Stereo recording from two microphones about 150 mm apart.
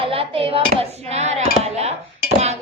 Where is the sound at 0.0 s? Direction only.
40° right (ahead or behind).